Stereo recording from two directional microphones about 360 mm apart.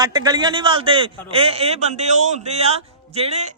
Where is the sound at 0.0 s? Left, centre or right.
Centre.